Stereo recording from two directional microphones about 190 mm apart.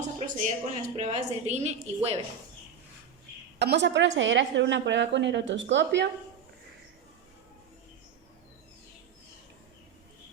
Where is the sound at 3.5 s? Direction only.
65° right (ahead or behind).